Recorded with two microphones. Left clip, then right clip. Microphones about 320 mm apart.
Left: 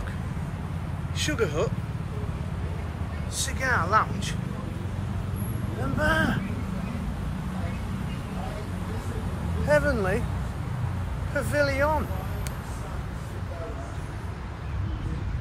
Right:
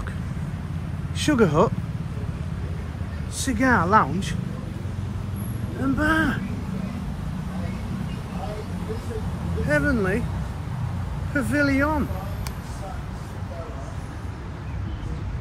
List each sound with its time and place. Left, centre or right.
1.1 s speech: centre
3.3 s speech: centre
5.9 s speech: centre
9.7 s speech: centre
11.3 s speech: centre